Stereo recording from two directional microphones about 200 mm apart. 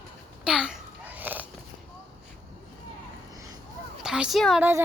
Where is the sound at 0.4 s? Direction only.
5° right (ahead or behind).